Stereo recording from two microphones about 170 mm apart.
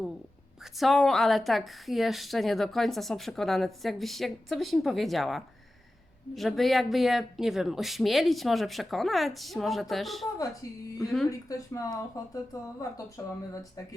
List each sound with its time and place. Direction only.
0.8 s a woman's voice: centre (ahead or behind)
11.3 s speech: 20° left (ahead or behind)
13.5 s speech: 20° left (ahead or behind)